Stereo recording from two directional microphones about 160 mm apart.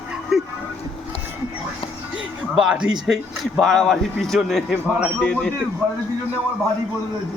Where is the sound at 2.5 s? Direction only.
5° right (ahead or behind).